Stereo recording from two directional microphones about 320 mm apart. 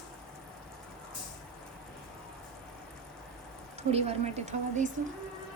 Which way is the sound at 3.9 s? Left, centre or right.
Centre.